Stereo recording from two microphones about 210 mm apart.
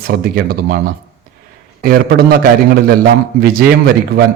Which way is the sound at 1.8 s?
45° right (ahead or behind).